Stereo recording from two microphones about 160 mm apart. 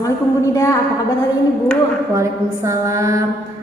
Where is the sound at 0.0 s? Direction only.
20° left (ahead or behind).